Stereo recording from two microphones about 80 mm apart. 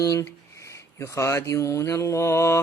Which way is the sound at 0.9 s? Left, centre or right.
Left.